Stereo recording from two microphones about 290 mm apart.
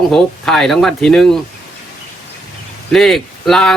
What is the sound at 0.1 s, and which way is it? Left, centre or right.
Speech, centre.